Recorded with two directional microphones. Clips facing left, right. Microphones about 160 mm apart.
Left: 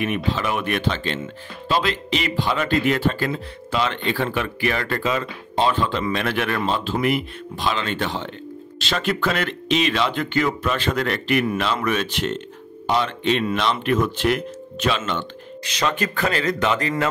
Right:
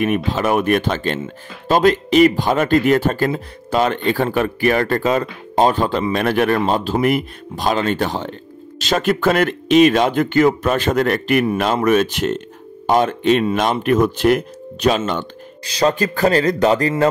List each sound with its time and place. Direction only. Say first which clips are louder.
0.0 s speech: right 5 dB; 45° right (ahead or behind)